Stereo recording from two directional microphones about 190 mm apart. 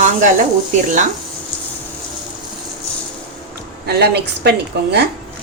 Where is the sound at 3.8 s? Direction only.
60° right (ahead or behind).